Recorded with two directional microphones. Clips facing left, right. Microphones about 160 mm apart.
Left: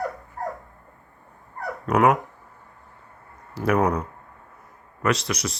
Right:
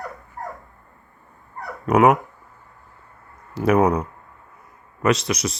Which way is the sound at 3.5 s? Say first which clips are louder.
Right 4 dB; 20° right (ahead or behind).